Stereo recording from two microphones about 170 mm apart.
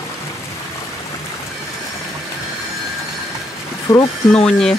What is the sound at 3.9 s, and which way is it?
Speech, 20° left (ahead or behind).